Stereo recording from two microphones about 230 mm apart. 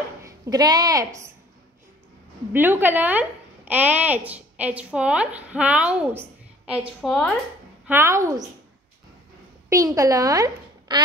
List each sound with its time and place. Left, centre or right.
0.2 s a woman's voice: centre
2.5 s speech: centre
7.8 s a woman's voice: centre
9.7 s a woman's voice: centre